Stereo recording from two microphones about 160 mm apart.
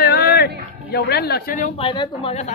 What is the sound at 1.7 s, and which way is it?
Speech, 30° left (ahead or behind).